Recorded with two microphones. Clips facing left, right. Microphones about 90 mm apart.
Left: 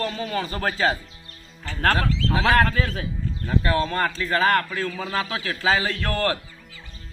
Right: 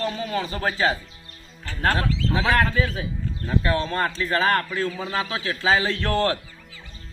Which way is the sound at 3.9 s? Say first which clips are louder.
Even; 30° right (ahead or behind).